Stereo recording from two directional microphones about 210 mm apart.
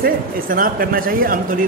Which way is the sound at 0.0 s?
45° right (ahead or behind).